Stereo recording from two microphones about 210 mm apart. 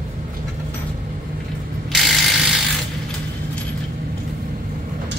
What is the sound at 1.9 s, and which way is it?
Ratchet, centre (ahead or behind).